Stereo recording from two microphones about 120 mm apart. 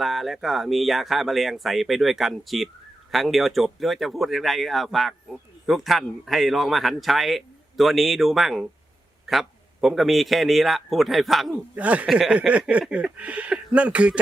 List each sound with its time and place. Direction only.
0.0 s speech: centre (ahead or behind)
11.7 s speech: 10° right (ahead or behind)